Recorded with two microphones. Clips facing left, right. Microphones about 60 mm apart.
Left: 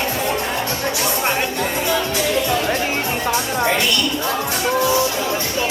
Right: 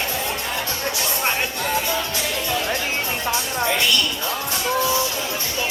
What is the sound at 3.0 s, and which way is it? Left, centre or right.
Music, left.